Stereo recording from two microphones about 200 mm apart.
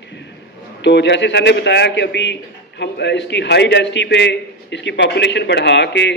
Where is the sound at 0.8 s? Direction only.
60° left (ahead or behind).